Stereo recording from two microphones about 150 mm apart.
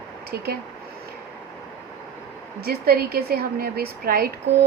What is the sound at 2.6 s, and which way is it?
A woman's voice, 90° right.